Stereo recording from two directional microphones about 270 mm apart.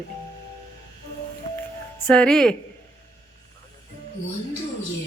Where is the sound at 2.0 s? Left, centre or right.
Centre.